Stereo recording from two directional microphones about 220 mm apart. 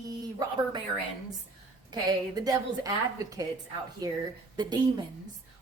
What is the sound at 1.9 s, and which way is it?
A woman's voice, 15° right (ahead or behind).